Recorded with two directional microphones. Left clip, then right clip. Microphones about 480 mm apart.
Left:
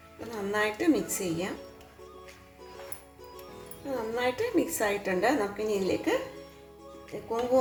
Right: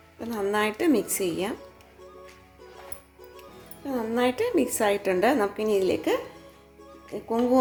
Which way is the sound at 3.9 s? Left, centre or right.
Centre.